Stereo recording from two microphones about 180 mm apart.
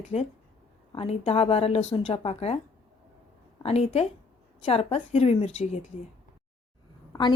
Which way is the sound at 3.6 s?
35° left (ahead or behind).